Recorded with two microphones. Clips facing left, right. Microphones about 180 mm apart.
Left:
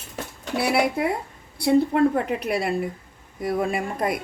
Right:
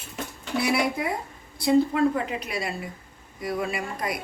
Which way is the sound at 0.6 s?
60° left (ahead or behind).